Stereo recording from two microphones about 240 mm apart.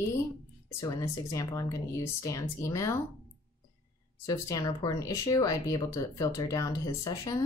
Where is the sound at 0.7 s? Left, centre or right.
Centre.